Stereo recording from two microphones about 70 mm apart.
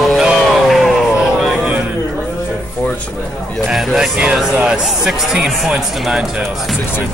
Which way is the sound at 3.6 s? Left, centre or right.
Centre.